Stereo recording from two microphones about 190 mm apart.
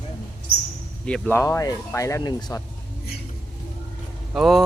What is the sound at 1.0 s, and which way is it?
Speech, 5° left (ahead or behind).